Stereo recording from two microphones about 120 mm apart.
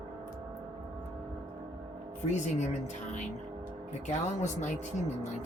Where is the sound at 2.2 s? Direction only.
80° left.